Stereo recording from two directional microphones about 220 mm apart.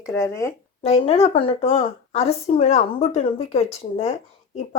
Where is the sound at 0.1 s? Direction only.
10° left (ahead or behind).